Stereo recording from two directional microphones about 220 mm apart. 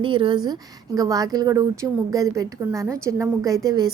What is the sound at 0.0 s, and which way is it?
A woman's voice, 20° right (ahead or behind).